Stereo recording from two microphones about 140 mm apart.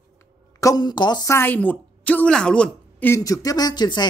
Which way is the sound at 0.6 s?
25° left (ahead or behind).